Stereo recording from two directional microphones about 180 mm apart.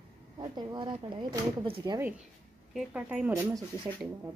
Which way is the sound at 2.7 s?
5° right (ahead or behind).